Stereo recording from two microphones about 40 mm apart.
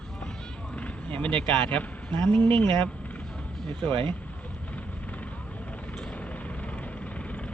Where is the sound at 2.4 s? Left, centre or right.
Left.